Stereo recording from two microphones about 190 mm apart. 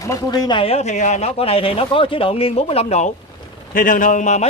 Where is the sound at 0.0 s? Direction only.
20° left (ahead or behind); by 3.1 s 35° left (ahead or behind).